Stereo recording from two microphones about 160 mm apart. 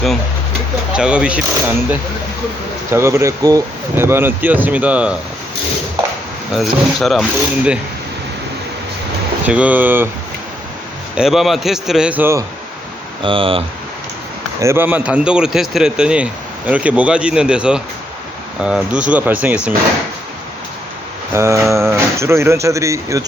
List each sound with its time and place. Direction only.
0.9 s speech: 5° right (ahead or behind)
2.9 s a man's voice: 15° right (ahead or behind)
6.5 s speech: centre (ahead or behind)
9.5 s a man's voice: 10° right (ahead or behind)
11.2 s speech: centre (ahead or behind)
13.2 s speech: 35° right (ahead or behind)
14.6 s a man's voice: 15° right (ahead or behind)
21.3 s a man's voice: 15° right (ahead or behind)